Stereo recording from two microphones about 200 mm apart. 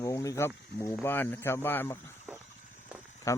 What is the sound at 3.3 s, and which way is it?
Speech, 15° left (ahead or behind).